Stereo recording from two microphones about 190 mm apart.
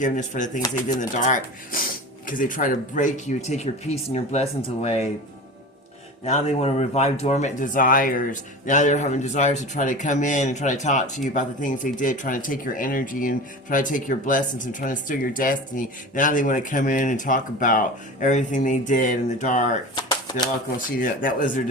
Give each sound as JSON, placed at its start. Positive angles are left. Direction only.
{"t": 0.0, "sound": "speech", "side_deg": 40}
{"t": 6.2, "sound": "speech", "side_deg": 35}
{"t": 20.0, "sound": "shuffling cards", "side_deg": 20}
{"t": 20.9, "sound": "speech", "side_deg": 45}